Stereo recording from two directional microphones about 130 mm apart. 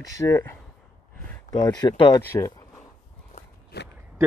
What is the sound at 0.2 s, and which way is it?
Speech, 25° left (ahead or behind).